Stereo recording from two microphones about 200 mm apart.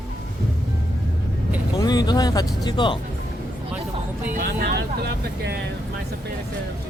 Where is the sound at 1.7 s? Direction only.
20° left (ahead or behind).